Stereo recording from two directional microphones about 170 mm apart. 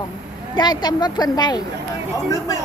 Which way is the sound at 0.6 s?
25° left (ahead or behind).